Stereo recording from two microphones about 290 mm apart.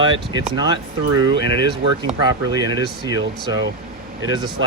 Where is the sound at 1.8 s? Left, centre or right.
Centre.